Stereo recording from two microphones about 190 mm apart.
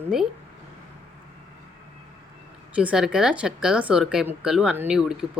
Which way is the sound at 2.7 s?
5° right (ahead or behind).